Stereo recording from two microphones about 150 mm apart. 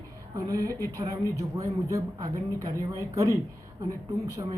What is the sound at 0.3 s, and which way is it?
Speech, 20° right (ahead or behind).